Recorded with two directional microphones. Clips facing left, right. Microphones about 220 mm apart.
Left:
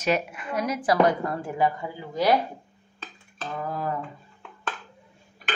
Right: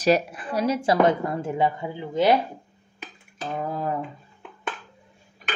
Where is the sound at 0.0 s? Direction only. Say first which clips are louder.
Right 5 dB; 35° right (ahead or behind).